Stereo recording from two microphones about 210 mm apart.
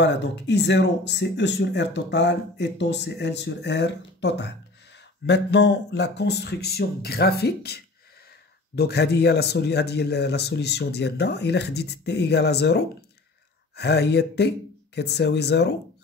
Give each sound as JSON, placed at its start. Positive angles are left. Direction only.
{"t": 0.0, "sound": "speech", "side_deg": 55}